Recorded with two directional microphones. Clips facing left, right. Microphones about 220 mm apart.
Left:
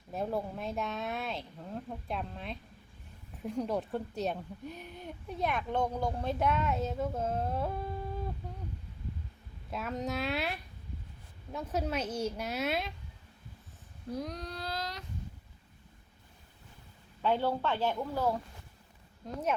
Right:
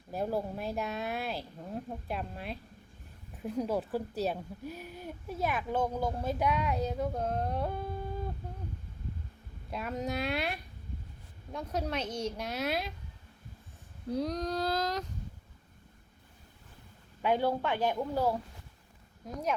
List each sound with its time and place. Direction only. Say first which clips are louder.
0.1 s a woman's voice: right 1 dB; centre (ahead or behind)
9.7 s a woman's voice: right 1 dB; centre (ahead or behind)
14.2 s speech: right 9 dB; 40° right (ahead or behind)
17.2 s a woman's voice: right 1 dB; 15° right (ahead or behind)